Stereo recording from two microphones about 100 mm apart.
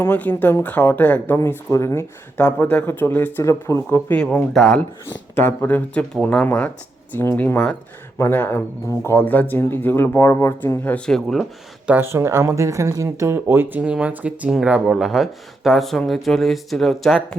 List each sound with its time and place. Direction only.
0.0 s speech: 15° left (ahead or behind)
1.5 s speech: 30° left (ahead or behind)
3.4 s speech: 30° left (ahead or behind)
3.8 s speech: 15° left (ahead or behind)
4.5 s speech: 5° left (ahead or behind)
5.5 s speech: 20° left (ahead or behind)
10.8 s speech: 10° left (ahead or behind)
11.9 s speech: 25° right (ahead or behind)
13.8 s speech: 10° right (ahead or behind)